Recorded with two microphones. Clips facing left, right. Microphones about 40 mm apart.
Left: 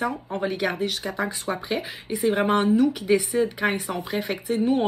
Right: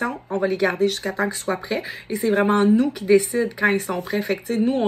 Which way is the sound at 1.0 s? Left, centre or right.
Right.